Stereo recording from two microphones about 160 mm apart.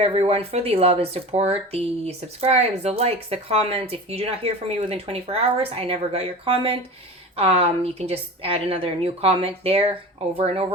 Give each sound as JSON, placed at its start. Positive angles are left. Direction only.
{"t": 0.0, "sound": "speech", "side_deg": -40}